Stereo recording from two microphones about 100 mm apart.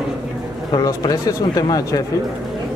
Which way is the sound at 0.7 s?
35° left (ahead or behind).